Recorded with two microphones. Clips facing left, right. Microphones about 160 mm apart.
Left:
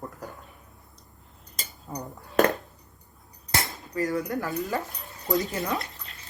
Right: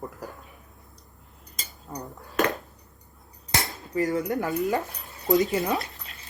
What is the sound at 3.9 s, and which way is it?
Speech, 20° right (ahead or behind).